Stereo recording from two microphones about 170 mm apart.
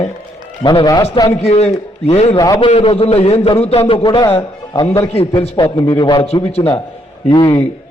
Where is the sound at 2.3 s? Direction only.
20° left (ahead or behind).